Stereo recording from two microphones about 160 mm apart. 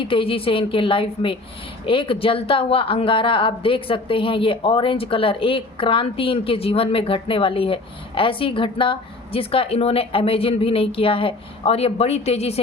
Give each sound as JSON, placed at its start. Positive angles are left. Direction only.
{"t": 0.0, "sound": "speech", "side_deg": 35}